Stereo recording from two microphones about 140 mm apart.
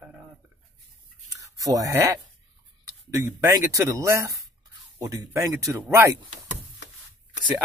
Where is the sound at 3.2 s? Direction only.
25° right (ahead or behind).